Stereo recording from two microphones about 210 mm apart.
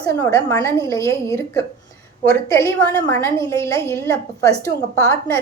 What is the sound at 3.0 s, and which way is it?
A woman's voice, 15° left (ahead or behind).